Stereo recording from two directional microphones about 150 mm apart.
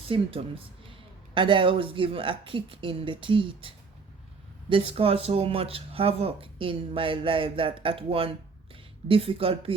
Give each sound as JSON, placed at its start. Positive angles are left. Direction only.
{"t": 0.1, "sound": "speech", "side_deg": -35}
{"t": 4.7, "sound": "speech", "side_deg": -35}